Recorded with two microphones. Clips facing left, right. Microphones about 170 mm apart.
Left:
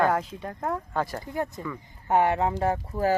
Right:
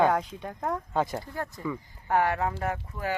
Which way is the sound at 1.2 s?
20° left (ahead or behind).